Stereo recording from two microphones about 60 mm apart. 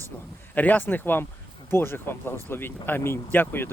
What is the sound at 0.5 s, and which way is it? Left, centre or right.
Speech, left.